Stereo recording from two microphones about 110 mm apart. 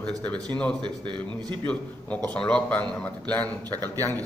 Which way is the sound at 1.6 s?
10° left (ahead or behind).